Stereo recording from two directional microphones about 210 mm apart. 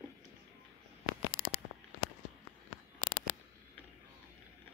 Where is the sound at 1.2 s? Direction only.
75° left (ahead or behind).